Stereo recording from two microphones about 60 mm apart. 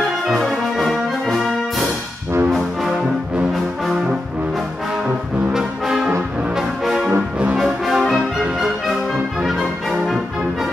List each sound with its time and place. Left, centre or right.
0.3 s brass instrument: centre
2.5 s music: centre
5.5 s brass instrument: centre
7.1 s brass instrument: right
7.5 s music: centre